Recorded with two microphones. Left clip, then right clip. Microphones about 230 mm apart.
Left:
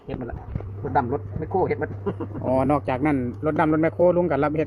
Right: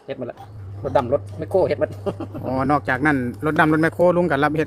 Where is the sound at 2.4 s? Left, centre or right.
Centre.